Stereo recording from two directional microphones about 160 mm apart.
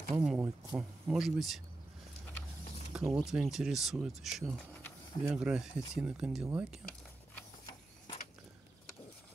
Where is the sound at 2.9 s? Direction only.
5° right (ahead or behind).